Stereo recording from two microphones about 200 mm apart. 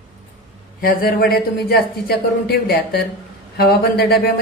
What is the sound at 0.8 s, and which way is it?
Speech, 45° left (ahead or behind).